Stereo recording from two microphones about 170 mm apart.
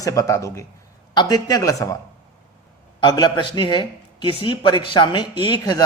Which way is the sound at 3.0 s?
25° left (ahead or behind).